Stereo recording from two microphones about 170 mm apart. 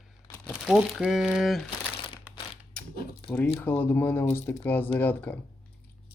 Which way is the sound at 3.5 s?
10° left (ahead or behind).